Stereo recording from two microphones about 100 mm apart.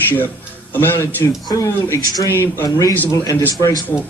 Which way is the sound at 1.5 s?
35° left (ahead or behind).